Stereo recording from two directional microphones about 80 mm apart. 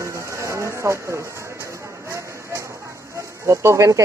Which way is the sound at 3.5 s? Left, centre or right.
Right.